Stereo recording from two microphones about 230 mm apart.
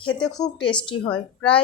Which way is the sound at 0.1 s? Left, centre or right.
Centre.